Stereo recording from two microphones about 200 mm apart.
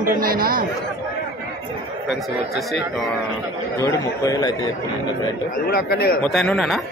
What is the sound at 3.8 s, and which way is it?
Speech, 15° left (ahead or behind).